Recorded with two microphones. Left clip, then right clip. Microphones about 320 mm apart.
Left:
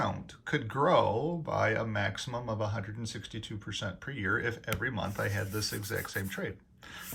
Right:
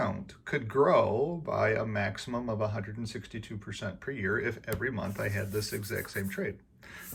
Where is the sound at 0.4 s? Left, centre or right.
Centre.